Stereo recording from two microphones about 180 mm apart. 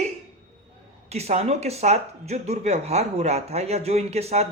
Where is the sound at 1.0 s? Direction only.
35° right (ahead or behind).